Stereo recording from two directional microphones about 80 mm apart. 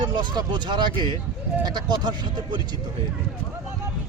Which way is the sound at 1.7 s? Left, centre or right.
Right.